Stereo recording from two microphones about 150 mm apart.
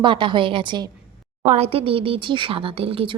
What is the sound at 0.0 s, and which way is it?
Speech, 30° right (ahead or behind).